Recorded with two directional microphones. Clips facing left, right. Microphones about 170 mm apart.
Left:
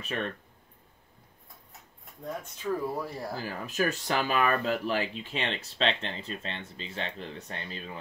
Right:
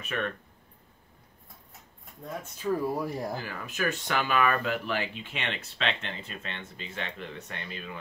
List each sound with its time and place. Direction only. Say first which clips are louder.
0.0 s speech: right 1 dB; 30° left (ahead or behind)
2.4 s speech: right 3 dB; 10° right (ahead or behind)
3.4 s speech: left 2 dB; 35° left (ahead or behind)